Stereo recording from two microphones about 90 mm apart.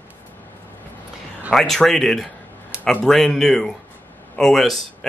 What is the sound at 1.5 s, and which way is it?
Speech, 5° left (ahead or behind).